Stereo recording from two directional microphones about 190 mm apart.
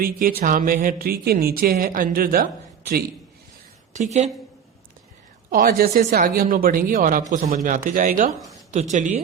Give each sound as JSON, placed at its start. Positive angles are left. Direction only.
{"t": 0.0, "sound": "speech", "side_deg": -50}
{"t": 3.9, "sound": "a woman's voice", "side_deg": -40}
{"t": 5.5, "sound": "a woman's voice", "side_deg": -50}